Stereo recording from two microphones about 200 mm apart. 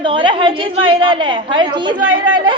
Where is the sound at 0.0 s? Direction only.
25° right (ahead or behind).